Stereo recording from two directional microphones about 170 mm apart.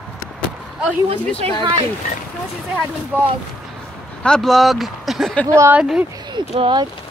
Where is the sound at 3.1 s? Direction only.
10° right (ahead or behind).